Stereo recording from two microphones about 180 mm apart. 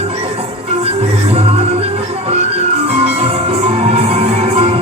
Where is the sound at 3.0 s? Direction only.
35° right (ahead or behind).